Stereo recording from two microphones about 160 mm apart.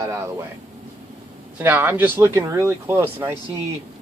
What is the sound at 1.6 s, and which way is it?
Speech, 15° right (ahead or behind).